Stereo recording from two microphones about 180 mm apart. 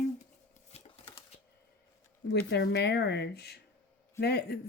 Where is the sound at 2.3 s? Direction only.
70° left (ahead or behind).